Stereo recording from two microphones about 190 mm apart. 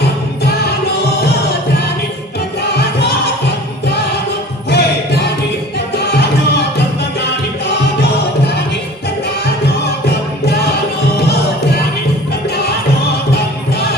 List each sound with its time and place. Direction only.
4.7 s music: 60° left (ahead or behind)
11.2 s music: 60° left (ahead or behind)